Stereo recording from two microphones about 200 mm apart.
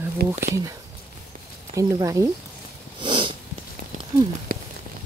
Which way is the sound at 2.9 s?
25° right (ahead or behind).